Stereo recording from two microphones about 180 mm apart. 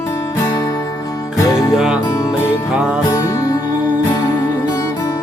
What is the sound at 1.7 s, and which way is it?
Music, 5° right (ahead or behind).